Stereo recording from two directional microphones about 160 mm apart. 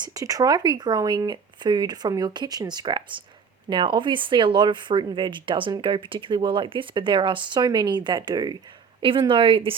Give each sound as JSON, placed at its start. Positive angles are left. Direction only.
{"t": 0.0, "sound": "speech", "side_deg": -20}